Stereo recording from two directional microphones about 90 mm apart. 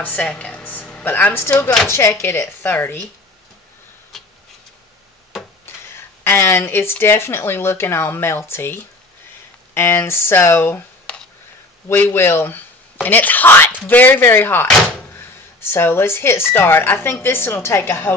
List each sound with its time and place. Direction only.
0.0 s a woman's voice: 15° left (ahead or behind)
5.3 s a sound: centre (ahead or behind)
5.9 s speech: 25° left (ahead or behind)
11.9 s speech: 25° left (ahead or behind)